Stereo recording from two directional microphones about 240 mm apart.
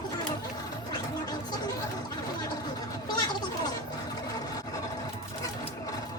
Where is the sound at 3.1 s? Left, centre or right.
Centre.